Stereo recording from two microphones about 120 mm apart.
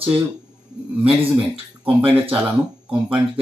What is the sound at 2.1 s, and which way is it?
Speech, 10° right (ahead or behind).